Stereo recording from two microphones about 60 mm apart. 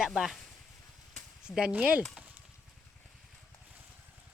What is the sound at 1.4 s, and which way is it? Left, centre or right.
Speech, centre.